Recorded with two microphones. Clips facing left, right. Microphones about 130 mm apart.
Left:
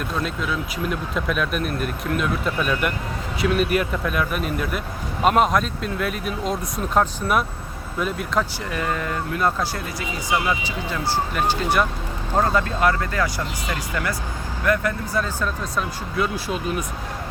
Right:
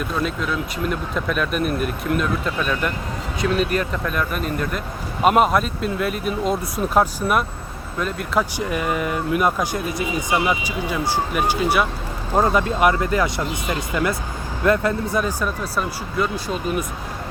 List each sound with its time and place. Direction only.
0.0 s speech: centre (ahead or behind)
8.4 s speech: 15° right (ahead or behind)